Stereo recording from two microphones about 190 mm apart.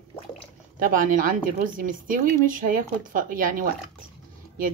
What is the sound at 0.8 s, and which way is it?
Speech, 45° right (ahead or behind).